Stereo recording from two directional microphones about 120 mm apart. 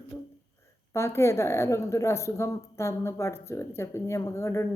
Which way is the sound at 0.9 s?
20° left (ahead or behind).